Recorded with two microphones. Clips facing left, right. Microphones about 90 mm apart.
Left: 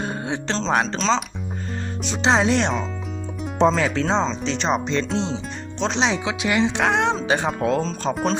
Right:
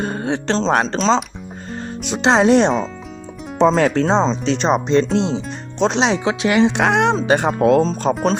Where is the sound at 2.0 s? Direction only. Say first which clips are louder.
Right 5 dB; 55° right (ahead or behind).